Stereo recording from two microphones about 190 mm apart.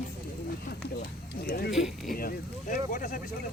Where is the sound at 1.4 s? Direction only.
55° left (ahead or behind).